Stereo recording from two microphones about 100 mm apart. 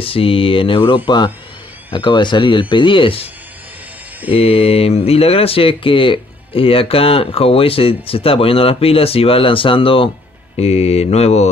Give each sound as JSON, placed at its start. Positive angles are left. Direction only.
{"t": 0.0, "sound": "speech", "side_deg": 65}
{"t": 4.4, "sound": "speech", "side_deg": 85}